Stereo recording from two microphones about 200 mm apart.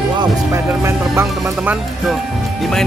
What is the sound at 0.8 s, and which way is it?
Music, 15° right (ahead or behind).